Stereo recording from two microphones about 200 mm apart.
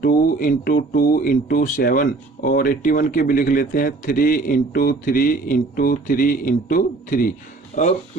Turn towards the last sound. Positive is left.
turn(degrees=40)  # may be behind; listen again after turning